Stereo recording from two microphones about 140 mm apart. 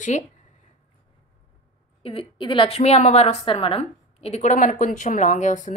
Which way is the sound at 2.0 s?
40° left (ahead or behind).